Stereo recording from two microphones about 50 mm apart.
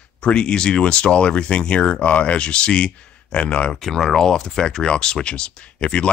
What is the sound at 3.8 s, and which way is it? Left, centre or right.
Speech, centre.